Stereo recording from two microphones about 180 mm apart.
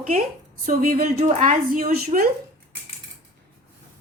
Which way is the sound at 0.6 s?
45° right (ahead or behind).